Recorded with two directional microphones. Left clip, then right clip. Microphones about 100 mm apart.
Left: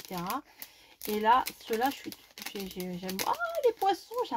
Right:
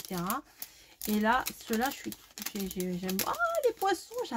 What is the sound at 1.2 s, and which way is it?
Speech, 40° left (ahead or behind).